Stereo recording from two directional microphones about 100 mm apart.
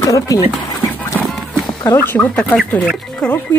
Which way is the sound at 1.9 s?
25° left (ahead or behind).